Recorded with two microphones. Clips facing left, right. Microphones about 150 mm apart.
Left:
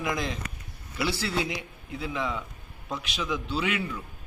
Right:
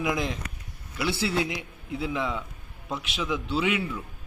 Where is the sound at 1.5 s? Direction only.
5° right (ahead or behind).